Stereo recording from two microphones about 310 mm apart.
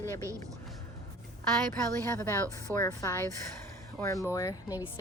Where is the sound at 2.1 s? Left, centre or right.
Centre.